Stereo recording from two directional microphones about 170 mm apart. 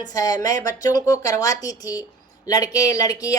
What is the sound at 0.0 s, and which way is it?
Speech, 20° left (ahead or behind).